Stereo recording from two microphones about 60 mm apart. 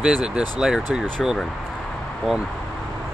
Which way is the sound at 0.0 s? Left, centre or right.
Centre.